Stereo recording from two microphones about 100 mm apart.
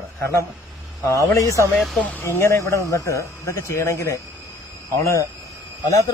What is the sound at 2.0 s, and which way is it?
Speech, 20° left (ahead or behind).